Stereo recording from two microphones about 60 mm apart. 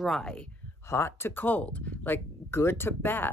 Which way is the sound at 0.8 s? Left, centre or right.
Left.